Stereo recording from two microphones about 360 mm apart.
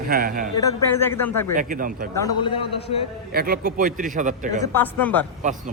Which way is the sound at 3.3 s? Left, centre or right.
Right.